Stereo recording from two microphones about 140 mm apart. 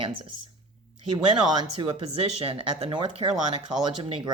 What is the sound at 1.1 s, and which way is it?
Speech, 35° right (ahead or behind).